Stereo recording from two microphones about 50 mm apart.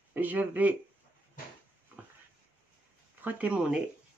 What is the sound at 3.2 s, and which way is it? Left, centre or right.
Speech, right.